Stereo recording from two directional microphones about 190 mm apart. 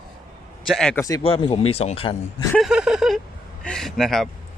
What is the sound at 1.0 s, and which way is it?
Speech, 20° left (ahead or behind).